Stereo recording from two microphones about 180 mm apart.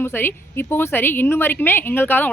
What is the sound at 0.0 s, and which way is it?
A woman's voice, 10° left (ahead or behind).